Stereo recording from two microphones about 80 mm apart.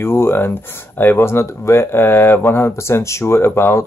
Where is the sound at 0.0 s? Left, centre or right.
Left.